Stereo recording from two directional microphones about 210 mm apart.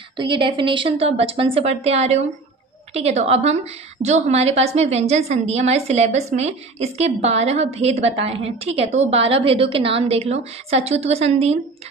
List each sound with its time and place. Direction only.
0.2 s a woman's voice: 25° right (ahead or behind)